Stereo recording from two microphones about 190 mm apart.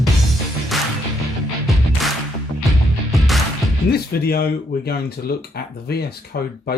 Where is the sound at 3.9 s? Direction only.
55° left (ahead or behind).